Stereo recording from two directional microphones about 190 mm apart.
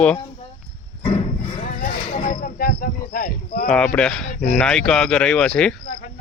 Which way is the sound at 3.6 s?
5° left (ahead or behind).